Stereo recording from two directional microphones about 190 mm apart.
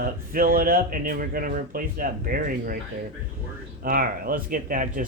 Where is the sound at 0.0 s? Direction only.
50° right (ahead or behind).